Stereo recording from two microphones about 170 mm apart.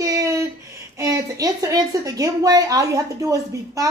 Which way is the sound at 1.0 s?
20° right (ahead or behind).